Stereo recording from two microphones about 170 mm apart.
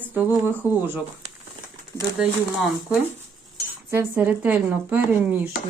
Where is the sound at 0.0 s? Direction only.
10° right (ahead or behind).